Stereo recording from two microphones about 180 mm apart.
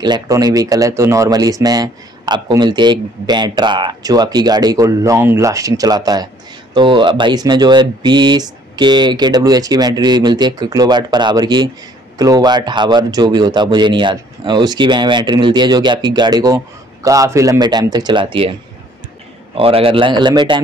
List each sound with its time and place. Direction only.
0.0 s speech: 20° right (ahead or behind)
19.5 s speech: 30° right (ahead or behind)